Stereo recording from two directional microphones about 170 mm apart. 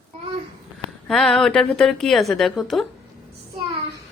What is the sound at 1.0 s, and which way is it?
A woman's voice, centre (ahead or behind).